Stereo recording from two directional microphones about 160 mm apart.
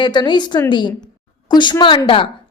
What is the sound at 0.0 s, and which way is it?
A woman's voice, 30° left (ahead or behind).